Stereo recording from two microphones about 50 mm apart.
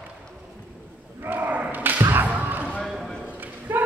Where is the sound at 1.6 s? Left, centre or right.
Right.